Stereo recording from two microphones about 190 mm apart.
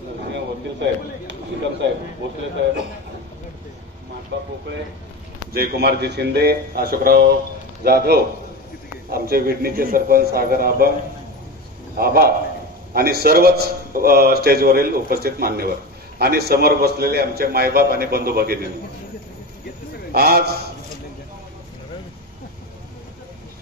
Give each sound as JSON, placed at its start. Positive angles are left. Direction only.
{"t": 0.3, "sound": "speech", "side_deg": -70}
{"t": 4.3, "sound": "speech", "side_deg": -70}
{"t": 5.5, "sound": "a man's voice", "side_deg": -55}
{"t": 12.0, "sound": "a man's voice", "side_deg": -55}
{"t": 20.1, "sound": "a man's voice", "side_deg": -55}